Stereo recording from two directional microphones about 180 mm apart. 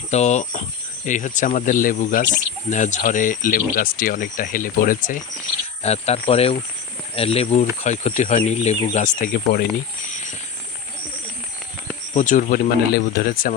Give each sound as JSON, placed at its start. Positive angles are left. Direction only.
{"t": 0.1, "sound": "speech", "side_deg": 40}
{"t": 5.8, "sound": "speech", "side_deg": 35}
{"t": 12.1, "sound": "speech", "side_deg": 45}